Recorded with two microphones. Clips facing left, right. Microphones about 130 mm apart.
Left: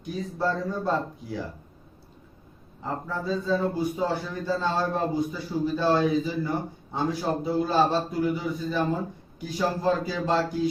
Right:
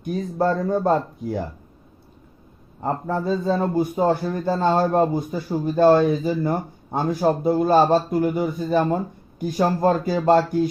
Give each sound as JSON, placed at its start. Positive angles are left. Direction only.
{"t": 0.0, "sound": "a man's voice", "side_deg": -50}
{"t": 2.8, "sound": "a man's voice", "side_deg": -55}